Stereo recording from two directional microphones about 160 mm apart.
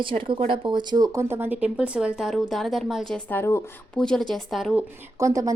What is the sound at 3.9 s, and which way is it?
Speech, 5° left (ahead or behind).